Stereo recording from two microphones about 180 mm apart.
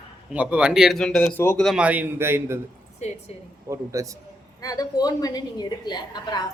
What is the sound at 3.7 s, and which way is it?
Speech, 15° right (ahead or behind).